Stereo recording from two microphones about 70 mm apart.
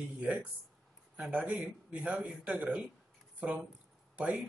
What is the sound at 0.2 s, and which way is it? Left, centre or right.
Speech, centre.